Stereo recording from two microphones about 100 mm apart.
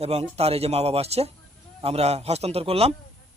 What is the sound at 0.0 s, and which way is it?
A woman's voice, 90° right.